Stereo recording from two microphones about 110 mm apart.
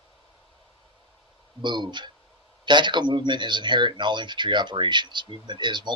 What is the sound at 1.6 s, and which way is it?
Speech, 45° right (ahead or behind).